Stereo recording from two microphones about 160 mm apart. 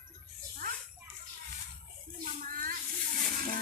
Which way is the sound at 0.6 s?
60° right (ahead or behind).